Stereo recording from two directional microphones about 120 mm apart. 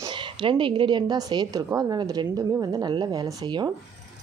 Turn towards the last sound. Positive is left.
turn(degrees=-35)  # may be behind; listen again after turning